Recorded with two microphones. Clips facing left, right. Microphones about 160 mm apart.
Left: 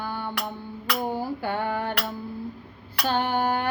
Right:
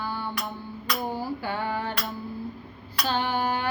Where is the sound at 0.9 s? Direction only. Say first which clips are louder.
Left 2 dB; 55° left (ahead or behind).